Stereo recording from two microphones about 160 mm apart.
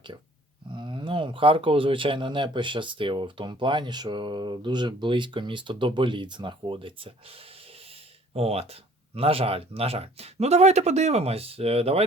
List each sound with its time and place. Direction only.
0.7 s speech: 30° right (ahead or behind)